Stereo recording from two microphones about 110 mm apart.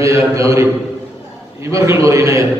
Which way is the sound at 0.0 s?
30° right (ahead or behind).